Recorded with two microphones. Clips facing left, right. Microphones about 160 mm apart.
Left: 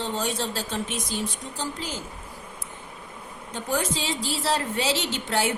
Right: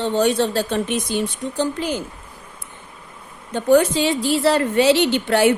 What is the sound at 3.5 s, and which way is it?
A woman's voice, 65° right (ahead or behind).